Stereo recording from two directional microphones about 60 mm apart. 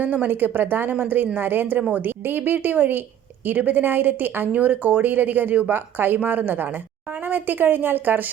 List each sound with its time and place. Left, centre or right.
0.0 s a woman's voice: right